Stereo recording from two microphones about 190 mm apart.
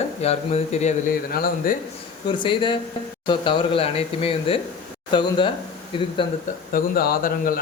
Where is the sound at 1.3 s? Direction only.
50° left (ahead or behind).